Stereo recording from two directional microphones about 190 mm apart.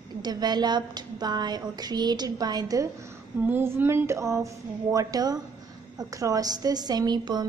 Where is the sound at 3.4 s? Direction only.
10° right (ahead or behind).